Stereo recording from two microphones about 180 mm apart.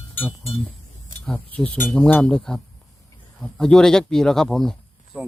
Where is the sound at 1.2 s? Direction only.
5° left (ahead or behind).